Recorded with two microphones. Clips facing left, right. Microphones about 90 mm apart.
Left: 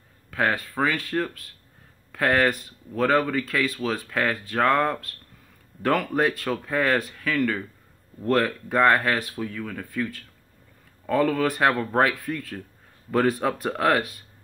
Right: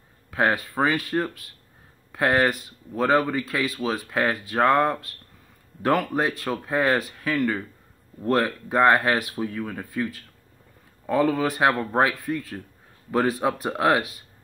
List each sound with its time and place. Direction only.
0.3 s speech: 15° right (ahead or behind)
9.8 s speech: 5° right (ahead or behind)